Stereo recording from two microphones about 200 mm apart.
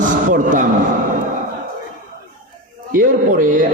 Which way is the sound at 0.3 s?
40° right (ahead or behind).